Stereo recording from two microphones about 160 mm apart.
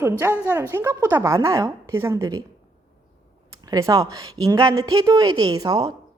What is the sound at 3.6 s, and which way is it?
A woman's voice, 25° right (ahead or behind).